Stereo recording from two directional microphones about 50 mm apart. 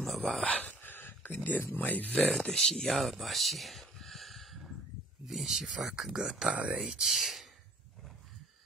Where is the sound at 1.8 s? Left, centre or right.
Left.